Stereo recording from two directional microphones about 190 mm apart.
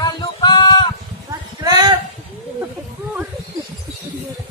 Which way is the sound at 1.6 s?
20° right (ahead or behind).